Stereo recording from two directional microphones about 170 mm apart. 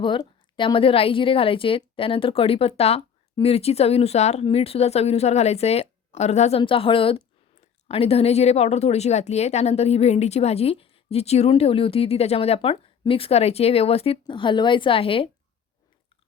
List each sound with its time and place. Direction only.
0.0 s speech: 30° left (ahead or behind)